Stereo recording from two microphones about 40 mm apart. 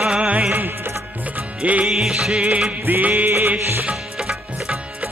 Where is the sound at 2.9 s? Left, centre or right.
Right.